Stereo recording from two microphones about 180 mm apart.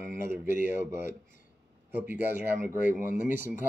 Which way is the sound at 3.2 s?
45° left (ahead or behind).